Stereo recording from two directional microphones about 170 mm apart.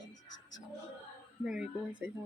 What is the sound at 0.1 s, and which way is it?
Music, 90° left.